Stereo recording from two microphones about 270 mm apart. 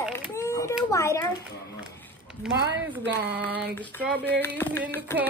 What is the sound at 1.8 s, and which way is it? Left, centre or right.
Run, centre.